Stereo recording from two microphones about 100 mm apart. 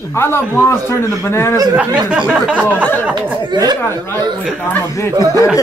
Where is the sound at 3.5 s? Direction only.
45° right (ahead or behind).